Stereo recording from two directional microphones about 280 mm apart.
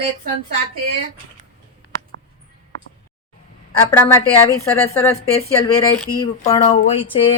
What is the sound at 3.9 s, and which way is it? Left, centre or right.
A woman's voice, centre.